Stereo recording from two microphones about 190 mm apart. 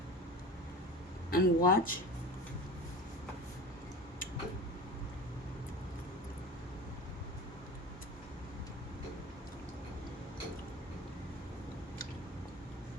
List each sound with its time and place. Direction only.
1.3 s speech: 50° left (ahead or behind)